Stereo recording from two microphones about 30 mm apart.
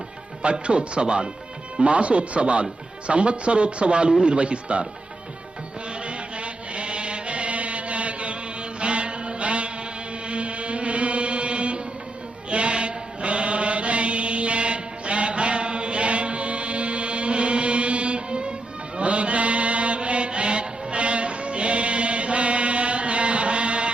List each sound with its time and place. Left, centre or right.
0.7 s speech: right
6.1 s mantra: right
10.2 s chant: right
12.5 s mantra: right